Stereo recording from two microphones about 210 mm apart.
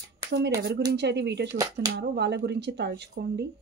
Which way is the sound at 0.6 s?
50° right (ahead or behind).